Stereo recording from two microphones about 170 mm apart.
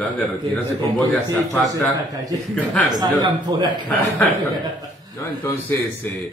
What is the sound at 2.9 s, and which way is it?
Speech, 25° right (ahead or behind).